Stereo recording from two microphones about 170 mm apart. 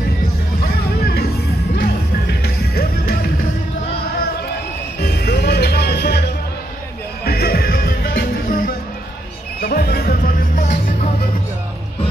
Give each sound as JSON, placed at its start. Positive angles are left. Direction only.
{"t": 0.6, "sound": "music", "side_deg": 65}
{"t": 5.0, "sound": "music", "side_deg": 70}